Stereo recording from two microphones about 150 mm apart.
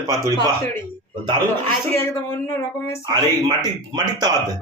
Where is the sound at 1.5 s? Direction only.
15° left (ahead or behind).